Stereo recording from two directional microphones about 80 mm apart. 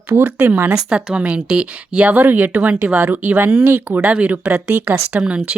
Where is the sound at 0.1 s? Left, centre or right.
Right.